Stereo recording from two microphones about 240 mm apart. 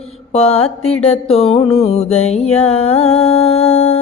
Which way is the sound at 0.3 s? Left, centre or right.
Left.